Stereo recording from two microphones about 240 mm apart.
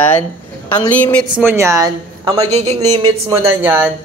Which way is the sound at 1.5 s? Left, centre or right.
Centre.